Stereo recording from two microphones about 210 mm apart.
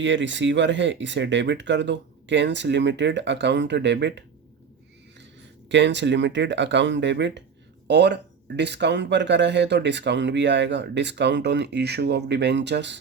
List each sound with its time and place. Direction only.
0.0 s speech: 60° right (ahead or behind)
5.6 s speech: 55° right (ahead or behind)